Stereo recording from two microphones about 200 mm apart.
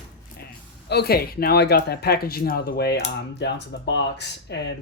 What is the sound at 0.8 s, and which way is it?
Speech, 55° left (ahead or behind).